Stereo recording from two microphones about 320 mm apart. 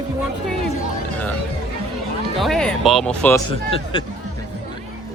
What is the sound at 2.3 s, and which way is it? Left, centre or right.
Speech, centre.